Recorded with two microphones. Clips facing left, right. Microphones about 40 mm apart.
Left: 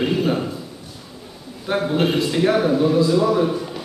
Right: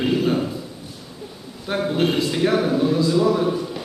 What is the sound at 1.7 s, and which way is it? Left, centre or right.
A man's voice, centre.